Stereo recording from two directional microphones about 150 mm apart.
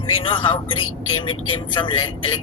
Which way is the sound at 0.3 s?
35° left (ahead or behind).